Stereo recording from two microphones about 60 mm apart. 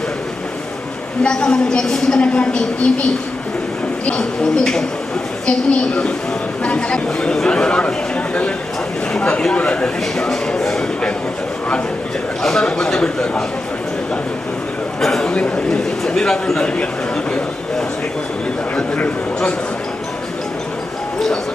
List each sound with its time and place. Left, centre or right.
1.2 s a woman's voice: centre
4.0 s a woman's voice: centre
9.1 s speech: centre
12.4 s a woman's voice: centre
15.0 s a sound: centre
15.3 s a man's voice: centre